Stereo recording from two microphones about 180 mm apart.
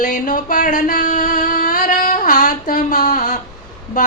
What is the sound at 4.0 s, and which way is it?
Music, 45° left (ahead or behind).